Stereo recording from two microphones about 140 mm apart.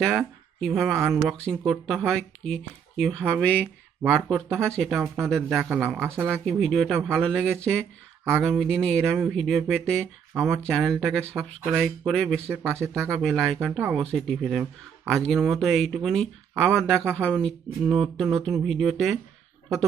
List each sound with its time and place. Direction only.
0.0 s speech: centre (ahead or behind)
0.9 s speech: 20° right (ahead or behind)
1.3 s speech: 5° left (ahead or behind)
5.5 s speech: 10° right (ahead or behind)
6.4 s speech: 5° left (ahead or behind)
12.6 s speech: 20° right (ahead or behind)
13.2 s speech: centre (ahead or behind)